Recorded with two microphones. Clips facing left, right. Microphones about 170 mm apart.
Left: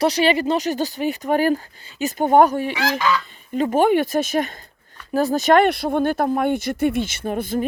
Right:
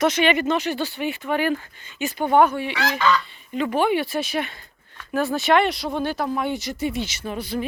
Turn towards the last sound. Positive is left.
turn(degrees=50)  # may be behind; listen again after turning